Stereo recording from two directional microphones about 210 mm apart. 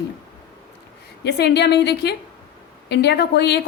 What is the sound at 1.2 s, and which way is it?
A woman's voice, 50° left (ahead or behind).